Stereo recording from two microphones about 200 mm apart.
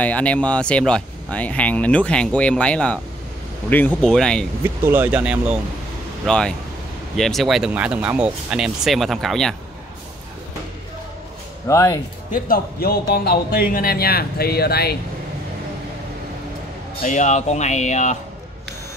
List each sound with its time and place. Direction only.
0.0 s speech: 5° left (ahead or behind)
4.6 s speech: 10° right (ahead or behind)
11.6 s speech: 15° left (ahead or behind)
12.4 s speech: 50° left (ahead or behind)
17.0 s speech: 35° left (ahead or behind)